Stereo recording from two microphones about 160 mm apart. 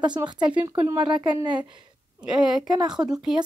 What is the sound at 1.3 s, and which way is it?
Speech, 25° right (ahead or behind).